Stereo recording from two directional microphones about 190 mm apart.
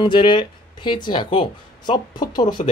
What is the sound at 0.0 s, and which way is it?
A man's voice, 25° left (ahead or behind).